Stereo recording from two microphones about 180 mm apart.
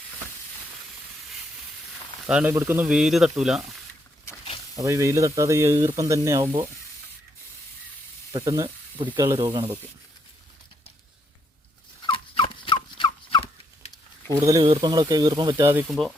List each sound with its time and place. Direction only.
2.2 s speech: 5° right (ahead or behind)
4.8 s speech: 15° right (ahead or behind)
8.3 s speech: 25° right (ahead or behind)
12.0 s turkey: 30° left (ahead or behind)
14.6 s speech: 25° right (ahead or behind)
15.9 s speech: centre (ahead or behind)